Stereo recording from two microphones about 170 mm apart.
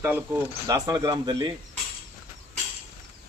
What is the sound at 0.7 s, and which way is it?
Speech, 20° right (ahead or behind).